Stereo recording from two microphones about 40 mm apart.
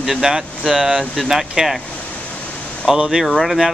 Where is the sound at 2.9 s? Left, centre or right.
Centre.